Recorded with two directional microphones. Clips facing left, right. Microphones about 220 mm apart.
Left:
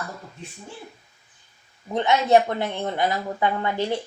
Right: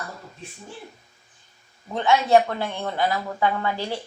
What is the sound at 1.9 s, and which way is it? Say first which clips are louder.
A woman's voice: even; 20° left (ahead or behind).